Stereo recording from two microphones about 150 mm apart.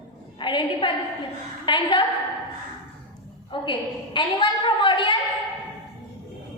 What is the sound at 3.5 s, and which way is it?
A woman's voice, 30° left (ahead or behind).